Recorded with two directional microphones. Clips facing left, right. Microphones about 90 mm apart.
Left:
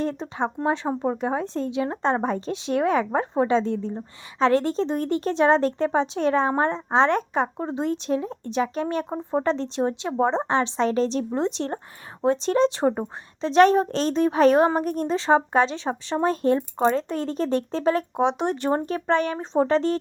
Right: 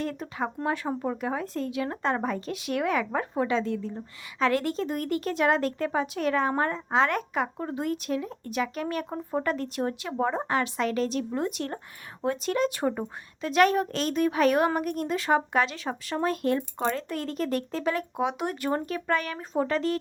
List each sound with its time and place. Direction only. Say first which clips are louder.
0.0 s speech: left 5 dB; 30° left (ahead or behind)